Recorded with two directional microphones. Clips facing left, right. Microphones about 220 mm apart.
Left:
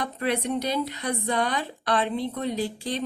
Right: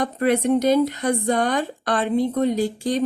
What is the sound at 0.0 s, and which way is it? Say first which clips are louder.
A woman's voice: right 7 dB; 50° right (ahead or behind).